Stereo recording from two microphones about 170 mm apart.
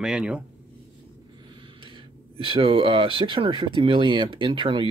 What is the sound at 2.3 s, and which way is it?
Speech, 30° right (ahead or behind).